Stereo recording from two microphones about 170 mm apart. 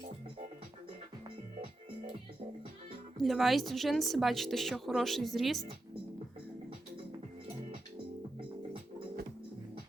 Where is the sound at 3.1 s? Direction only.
Centre (ahead or behind).